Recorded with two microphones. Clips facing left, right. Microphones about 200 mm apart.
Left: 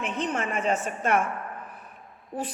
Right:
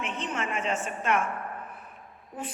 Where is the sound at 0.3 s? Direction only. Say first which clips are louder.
Left 2 dB; 40° left (ahead or behind).